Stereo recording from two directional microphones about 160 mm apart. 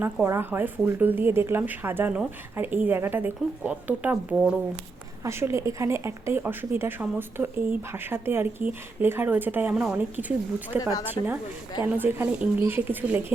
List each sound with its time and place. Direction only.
0.0 s speech: 15° right (ahead or behind)
11.2 s a woman's voice: 25° left (ahead or behind)
11.8 s speech: 10° right (ahead or behind)